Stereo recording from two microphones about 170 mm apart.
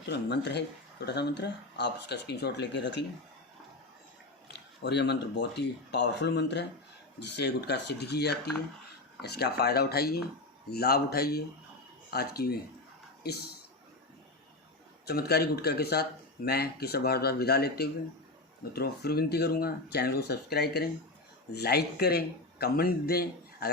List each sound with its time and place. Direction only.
0.1 s speech: 90° left
4.5 s speech: 90° left; by 13.4 s 70° left (ahead or behind)
15.0 s speech: 70° left (ahead or behind)